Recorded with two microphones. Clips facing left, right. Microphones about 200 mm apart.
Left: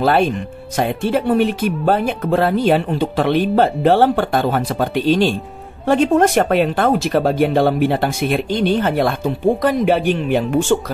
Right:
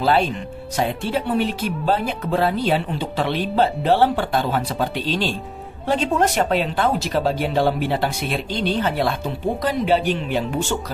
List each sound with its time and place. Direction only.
0.0 s speech: 55° left (ahead or behind)